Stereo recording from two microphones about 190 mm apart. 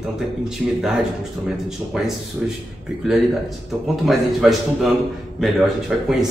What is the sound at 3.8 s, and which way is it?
Speech, centre (ahead or behind).